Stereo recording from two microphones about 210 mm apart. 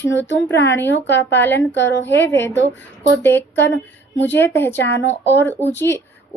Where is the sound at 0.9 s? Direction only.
60° left (ahead or behind).